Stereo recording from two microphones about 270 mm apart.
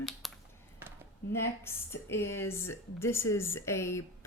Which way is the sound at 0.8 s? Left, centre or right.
Centre.